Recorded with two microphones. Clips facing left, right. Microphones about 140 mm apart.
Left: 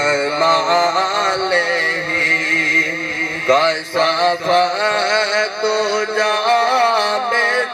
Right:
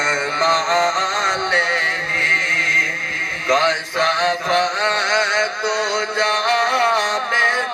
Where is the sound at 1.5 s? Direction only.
30° left (ahead or behind).